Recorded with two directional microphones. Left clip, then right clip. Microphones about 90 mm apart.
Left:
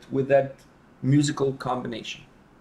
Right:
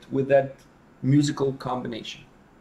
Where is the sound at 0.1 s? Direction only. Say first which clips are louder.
Even; 10° left (ahead or behind).